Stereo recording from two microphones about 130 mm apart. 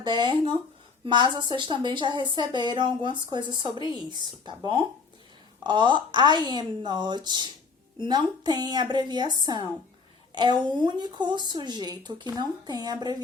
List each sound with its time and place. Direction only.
0.0 s speech: 35° right (ahead or behind)